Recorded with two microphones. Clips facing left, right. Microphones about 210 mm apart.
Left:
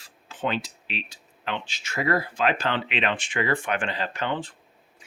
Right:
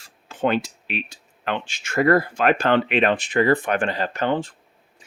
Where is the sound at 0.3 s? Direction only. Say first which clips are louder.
Right 7 dB; 50° right (ahead or behind).